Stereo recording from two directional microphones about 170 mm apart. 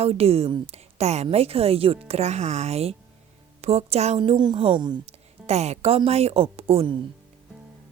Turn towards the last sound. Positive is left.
turn(degrees=-35)  # may be behind; listen again after turning